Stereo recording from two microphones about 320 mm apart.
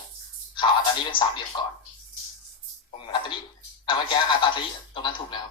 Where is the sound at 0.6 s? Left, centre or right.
Centre.